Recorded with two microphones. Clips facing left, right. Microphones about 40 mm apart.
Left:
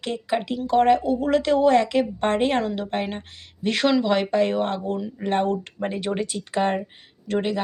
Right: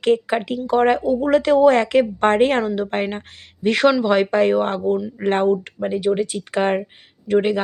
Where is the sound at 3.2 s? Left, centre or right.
Right.